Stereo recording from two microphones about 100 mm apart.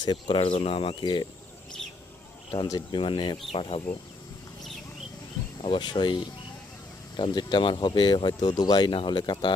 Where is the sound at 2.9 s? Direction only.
55° left (ahead or behind).